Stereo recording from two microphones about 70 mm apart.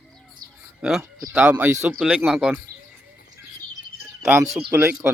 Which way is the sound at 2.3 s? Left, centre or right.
Centre.